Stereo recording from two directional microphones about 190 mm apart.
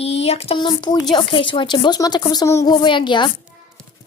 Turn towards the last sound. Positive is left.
turn(degrees=25)  # may be behind; listen again after turning